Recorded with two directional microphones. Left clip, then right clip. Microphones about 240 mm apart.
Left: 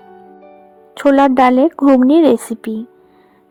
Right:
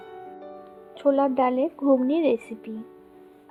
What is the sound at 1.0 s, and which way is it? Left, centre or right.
Speech, left.